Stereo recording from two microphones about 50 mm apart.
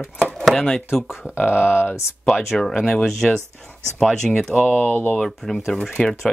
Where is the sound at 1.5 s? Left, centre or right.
Left.